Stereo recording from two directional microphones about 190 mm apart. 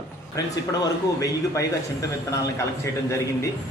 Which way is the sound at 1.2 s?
15° left (ahead or behind).